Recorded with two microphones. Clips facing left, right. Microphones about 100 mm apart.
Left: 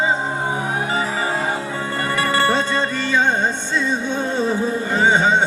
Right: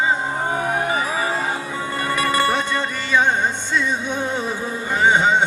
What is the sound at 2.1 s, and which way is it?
Music, 15° right (ahead or behind).